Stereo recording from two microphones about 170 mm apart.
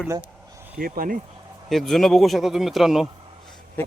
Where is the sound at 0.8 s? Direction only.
60° right (ahead or behind).